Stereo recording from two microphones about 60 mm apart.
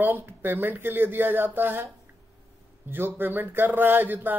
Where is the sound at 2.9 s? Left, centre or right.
Right.